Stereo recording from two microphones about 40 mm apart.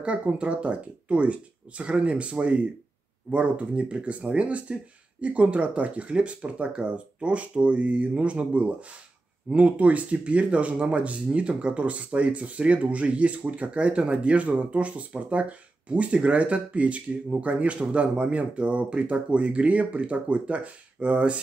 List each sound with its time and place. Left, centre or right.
0.0 s speech: right